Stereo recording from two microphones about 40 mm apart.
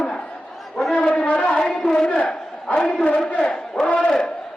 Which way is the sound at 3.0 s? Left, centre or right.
Left.